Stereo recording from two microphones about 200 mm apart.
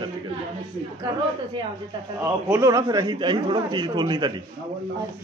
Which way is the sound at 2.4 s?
15° right (ahead or behind).